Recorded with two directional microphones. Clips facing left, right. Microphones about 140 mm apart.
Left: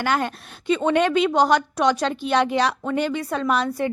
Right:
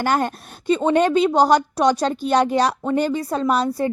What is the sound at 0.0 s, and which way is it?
A woman's voice, 45° right (ahead or behind).